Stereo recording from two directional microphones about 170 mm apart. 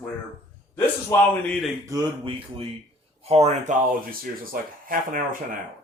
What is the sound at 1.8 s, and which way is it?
Speech, 25° right (ahead or behind).